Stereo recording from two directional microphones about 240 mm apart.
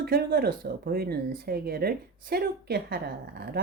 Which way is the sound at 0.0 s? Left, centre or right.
Right.